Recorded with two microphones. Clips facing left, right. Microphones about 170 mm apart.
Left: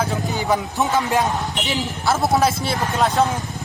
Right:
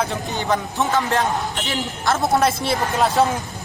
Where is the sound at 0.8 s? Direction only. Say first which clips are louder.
Even; 15° left (ahead or behind).